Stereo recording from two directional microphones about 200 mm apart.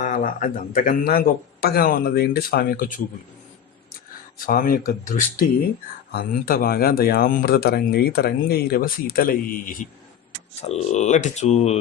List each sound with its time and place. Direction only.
0.0 s speech: 40° left (ahead or behind)
4.4 s speech: 45° left (ahead or behind)
10.6 s speech: 35° left (ahead or behind)